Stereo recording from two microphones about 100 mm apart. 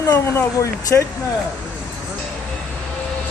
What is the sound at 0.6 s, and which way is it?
Speech, 30° left (ahead or behind).